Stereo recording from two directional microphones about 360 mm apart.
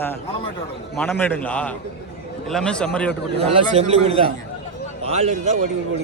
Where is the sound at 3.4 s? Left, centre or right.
Centre.